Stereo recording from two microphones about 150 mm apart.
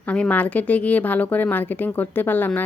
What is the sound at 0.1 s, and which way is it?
Speech, 10° left (ahead or behind).